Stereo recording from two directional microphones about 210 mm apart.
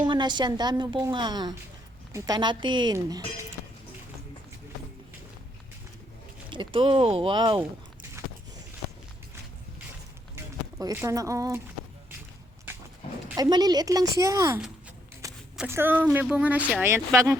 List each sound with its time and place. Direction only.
0.0 s a woman's voice: 20° right (ahead or behind)
6.5 s a woman's voice: 25° right (ahead or behind)
10.3 s speech: 15° right (ahead or behind)
13.2 s speech: 15° right (ahead or behind)